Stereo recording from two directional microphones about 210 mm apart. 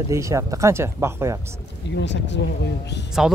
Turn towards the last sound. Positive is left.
turn(degrees=55)  # may be behind; listen again after turning